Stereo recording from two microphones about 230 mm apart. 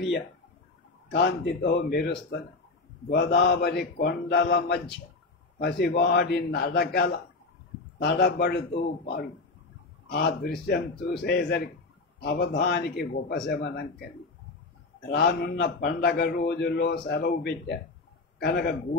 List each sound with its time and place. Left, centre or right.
1.1 s a man's voice: left